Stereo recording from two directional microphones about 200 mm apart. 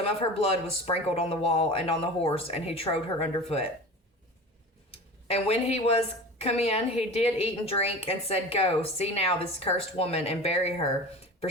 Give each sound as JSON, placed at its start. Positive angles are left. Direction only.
{"t": 0.0, "sound": "speech", "side_deg": 30}
{"t": 5.3, "sound": "a woman's voice", "side_deg": 30}